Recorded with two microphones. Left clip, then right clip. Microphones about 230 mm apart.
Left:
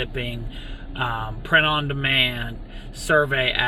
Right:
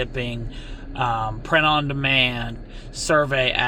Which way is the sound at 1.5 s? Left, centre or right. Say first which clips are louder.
Even; centre.